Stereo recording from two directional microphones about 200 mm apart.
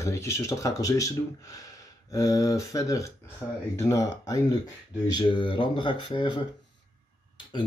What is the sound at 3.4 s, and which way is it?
Speech, 5° right (ahead or behind).